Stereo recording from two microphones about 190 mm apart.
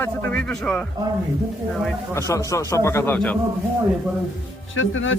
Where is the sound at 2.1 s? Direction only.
15° left (ahead or behind).